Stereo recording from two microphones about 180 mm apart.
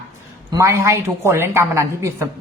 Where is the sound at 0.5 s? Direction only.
15° right (ahead or behind).